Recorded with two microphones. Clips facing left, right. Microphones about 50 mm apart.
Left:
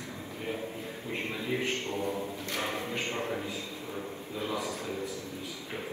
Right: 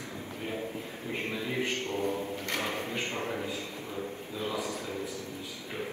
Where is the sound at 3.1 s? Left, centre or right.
Right.